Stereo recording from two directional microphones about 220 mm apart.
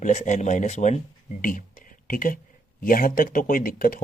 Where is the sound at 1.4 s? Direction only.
40° left (ahead or behind).